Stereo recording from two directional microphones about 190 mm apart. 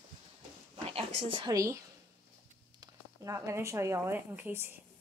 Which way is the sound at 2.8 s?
15° right (ahead or behind).